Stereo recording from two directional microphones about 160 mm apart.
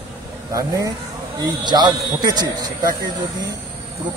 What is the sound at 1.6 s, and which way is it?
Speech, 25° right (ahead or behind).